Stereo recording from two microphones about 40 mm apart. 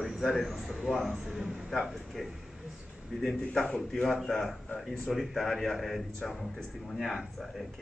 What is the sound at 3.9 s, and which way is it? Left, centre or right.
A man's voice, centre.